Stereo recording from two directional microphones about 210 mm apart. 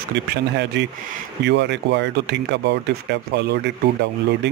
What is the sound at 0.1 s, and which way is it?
Speech, 55° right (ahead or behind).